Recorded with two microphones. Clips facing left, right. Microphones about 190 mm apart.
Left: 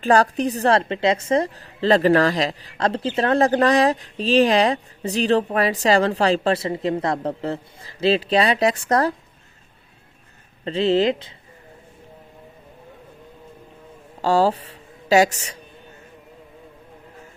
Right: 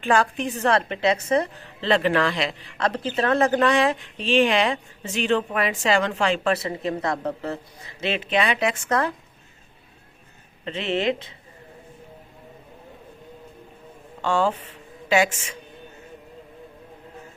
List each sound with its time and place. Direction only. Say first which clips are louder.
0.0 s a woman's voice: left 4 dB; 40° left (ahead or behind)
10.7 s speech: left 6 dB; 30° left (ahead or behind)
14.2 s speech: left 4 dB; 35° left (ahead or behind)